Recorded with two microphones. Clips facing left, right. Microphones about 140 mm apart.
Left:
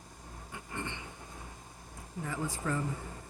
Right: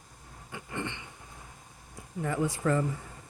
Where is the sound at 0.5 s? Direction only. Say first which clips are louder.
Right 4 dB; 80° right.